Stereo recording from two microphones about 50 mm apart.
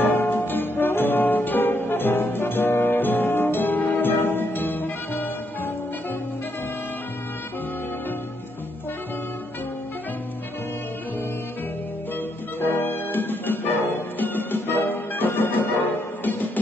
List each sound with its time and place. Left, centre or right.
0.0 s music: left
12.5 s music: left